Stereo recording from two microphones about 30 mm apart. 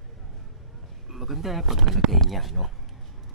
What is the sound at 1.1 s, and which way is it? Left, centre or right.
Speech, centre.